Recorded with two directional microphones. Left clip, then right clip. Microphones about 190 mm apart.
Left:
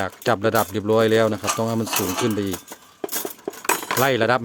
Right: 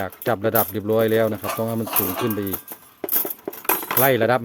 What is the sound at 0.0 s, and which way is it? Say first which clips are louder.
Speech: left 2 dB; 5° left (ahead or behind).